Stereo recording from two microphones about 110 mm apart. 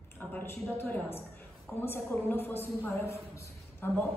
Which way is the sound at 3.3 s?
25° left (ahead or behind).